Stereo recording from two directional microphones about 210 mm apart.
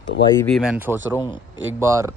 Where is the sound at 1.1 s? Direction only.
20° left (ahead or behind).